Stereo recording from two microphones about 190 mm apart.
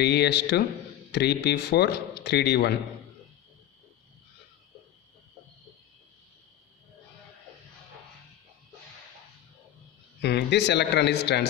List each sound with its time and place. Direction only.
0.0 s speech: 60° left (ahead or behind)
10.2 s speech: 65° left (ahead or behind)